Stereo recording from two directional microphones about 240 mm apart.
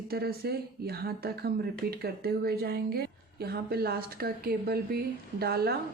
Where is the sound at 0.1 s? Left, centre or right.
Right.